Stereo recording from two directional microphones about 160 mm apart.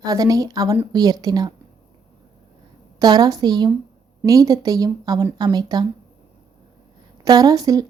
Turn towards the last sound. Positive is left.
turn(degrees=-25)  # may be behind; listen again after turning